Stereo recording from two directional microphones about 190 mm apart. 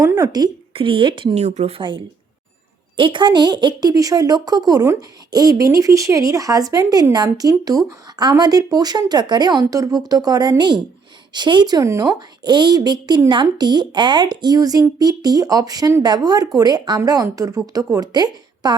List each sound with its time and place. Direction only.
0.0 s a woman's voice: 15° right (ahead or behind)